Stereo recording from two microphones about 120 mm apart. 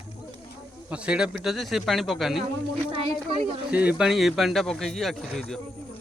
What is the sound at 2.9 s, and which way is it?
Speech, 55° right (ahead or behind).